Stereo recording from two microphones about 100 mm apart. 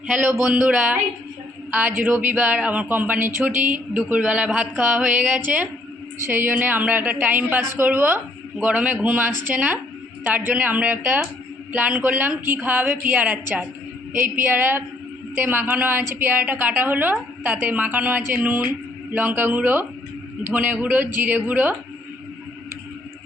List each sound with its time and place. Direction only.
0.4 s speech: 10° right (ahead or behind)
2.0 s a woman's voice: 20° right (ahead or behind)